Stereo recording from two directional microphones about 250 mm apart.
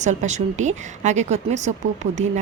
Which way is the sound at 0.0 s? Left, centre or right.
Right.